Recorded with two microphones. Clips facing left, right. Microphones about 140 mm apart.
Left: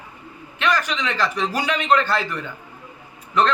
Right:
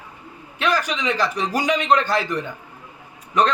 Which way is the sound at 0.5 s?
10° right (ahead or behind).